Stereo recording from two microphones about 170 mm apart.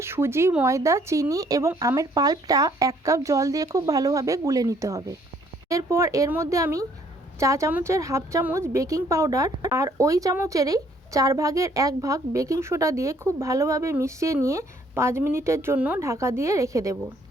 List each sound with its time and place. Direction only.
0.0 s a woman's voice: 15° right (ahead or behind)